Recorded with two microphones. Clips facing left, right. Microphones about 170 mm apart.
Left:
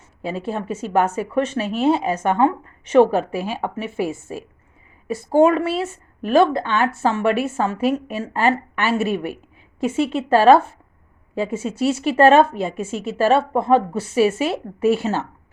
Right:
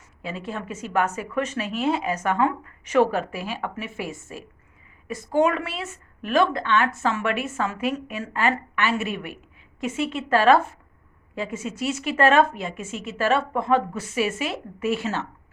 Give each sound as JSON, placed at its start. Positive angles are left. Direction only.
{"t": 0.2, "sound": "a woman's voice", "side_deg": 30}